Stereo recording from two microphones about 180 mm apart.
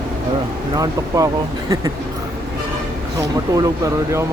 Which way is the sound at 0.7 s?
20° right (ahead or behind).